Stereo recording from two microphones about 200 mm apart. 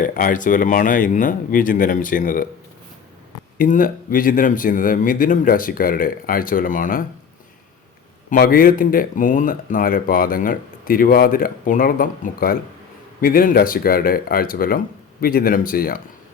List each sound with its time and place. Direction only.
0.0 s speech: 40° left (ahead or behind)
3.6 s speech: 45° left (ahead or behind)
8.3 s speech: 45° left (ahead or behind)